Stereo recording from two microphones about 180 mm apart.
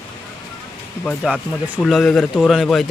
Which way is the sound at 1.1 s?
5° left (ahead or behind).